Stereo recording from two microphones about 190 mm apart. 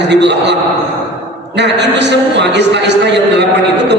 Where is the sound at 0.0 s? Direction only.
65° right (ahead or behind).